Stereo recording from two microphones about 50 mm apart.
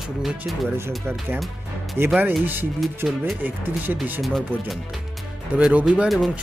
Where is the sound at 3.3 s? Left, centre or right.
Right.